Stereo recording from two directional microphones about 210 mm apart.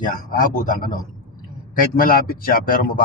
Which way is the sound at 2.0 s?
45° left (ahead or behind).